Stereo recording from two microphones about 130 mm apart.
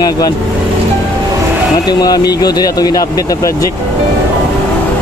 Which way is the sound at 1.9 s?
30° left (ahead or behind).